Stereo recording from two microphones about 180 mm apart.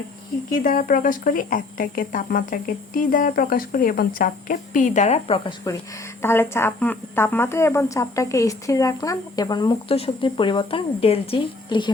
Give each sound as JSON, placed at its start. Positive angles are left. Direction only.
{"t": 0.6, "sound": "speech", "side_deg": 55}
{"t": 6.2, "sound": "speech", "side_deg": 15}